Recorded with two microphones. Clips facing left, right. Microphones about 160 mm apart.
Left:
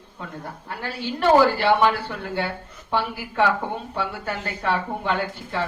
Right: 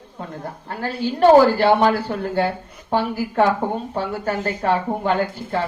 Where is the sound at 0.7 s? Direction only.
45° right (ahead or behind).